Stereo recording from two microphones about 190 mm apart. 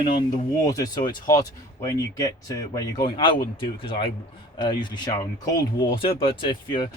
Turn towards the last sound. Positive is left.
turn(degrees=25)  # may be behind; listen again after turning